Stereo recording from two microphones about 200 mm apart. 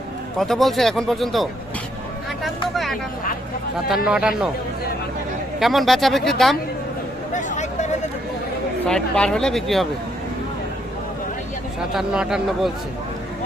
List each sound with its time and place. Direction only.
0.3 s speech: centre (ahead or behind)
3.8 s speech: 5° right (ahead or behind)
5.5 s speech: centre (ahead or behind)
7.3 s a sound: 35° left (ahead or behind)
8.9 s speech: 5° left (ahead or behind)
11.8 s speech: 5° right (ahead or behind)